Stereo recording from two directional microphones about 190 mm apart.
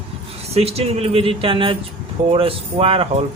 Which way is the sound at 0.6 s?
30° right (ahead or behind).